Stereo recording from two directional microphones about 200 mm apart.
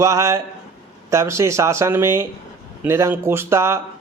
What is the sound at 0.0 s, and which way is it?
Speech, 15° right (ahead or behind).